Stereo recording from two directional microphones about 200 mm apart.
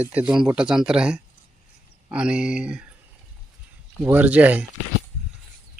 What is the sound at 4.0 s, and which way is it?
Speech, 10° right (ahead or behind).